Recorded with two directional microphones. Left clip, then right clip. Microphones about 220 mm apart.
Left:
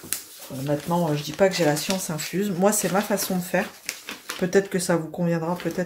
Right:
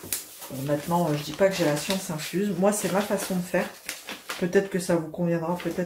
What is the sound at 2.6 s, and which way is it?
Speech, 45° left (ahead or behind).